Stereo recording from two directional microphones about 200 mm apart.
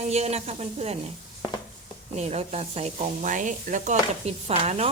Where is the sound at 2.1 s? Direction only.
35° right (ahead or behind).